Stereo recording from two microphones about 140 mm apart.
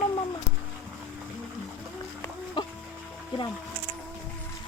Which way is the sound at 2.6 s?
30° left (ahead or behind).